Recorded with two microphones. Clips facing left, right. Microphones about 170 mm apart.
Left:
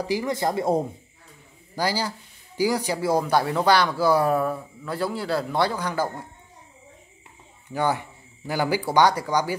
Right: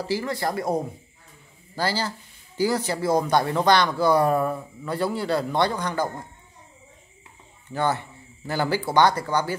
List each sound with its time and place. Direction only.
0.0 s speech: 15° left (ahead or behind)
1.8 s speech: 10° left (ahead or behind)
7.7 s speech: 10° left (ahead or behind)